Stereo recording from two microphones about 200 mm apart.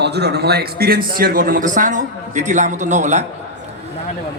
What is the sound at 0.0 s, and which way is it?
A man's voice, 55° right (ahead or behind).